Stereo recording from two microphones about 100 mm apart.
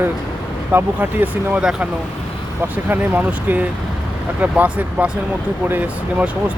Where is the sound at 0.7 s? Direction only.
20° right (ahead or behind).